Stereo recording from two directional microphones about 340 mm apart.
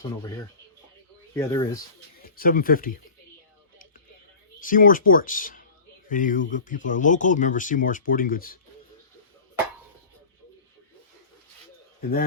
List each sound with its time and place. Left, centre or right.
1.3 s speech: centre
2.2 s speech: left
4.6 s speech: left